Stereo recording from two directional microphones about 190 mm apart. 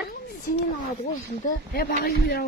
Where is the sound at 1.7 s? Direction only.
55° left (ahead or behind).